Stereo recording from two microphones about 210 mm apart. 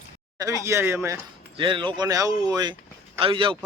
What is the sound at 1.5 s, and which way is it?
Speech, 25° right (ahead or behind).